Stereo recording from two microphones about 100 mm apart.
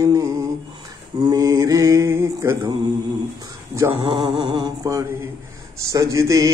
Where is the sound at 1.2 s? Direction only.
40° right (ahead or behind).